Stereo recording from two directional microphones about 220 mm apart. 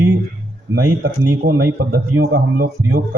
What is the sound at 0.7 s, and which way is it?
Speech, 55° right (ahead or behind).